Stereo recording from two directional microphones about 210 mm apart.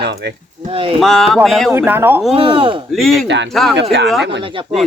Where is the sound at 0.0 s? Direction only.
50° right (ahead or behind).